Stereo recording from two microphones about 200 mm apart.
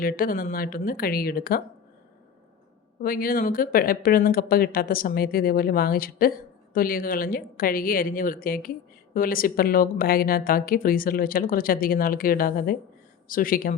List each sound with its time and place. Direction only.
0.0 s speech: 45° left (ahead or behind)
3.0 s speech: 45° left (ahead or behind)